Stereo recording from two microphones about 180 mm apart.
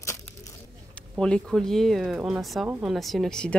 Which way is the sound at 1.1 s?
5° left (ahead or behind).